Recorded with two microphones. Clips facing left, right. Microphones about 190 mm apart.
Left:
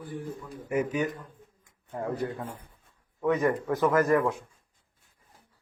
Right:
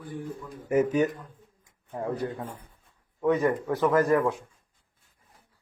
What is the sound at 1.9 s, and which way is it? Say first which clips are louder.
Speech: right 1 dB; 15° right (ahead or behind).